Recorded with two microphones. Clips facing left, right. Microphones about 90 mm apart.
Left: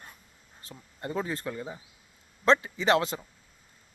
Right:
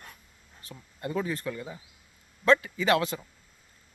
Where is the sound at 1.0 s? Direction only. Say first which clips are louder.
Right 1 dB; 30° left (ahead or behind).